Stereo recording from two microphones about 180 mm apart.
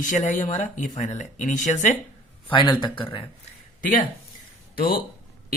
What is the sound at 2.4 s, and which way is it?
Speech, 30° left (ahead or behind).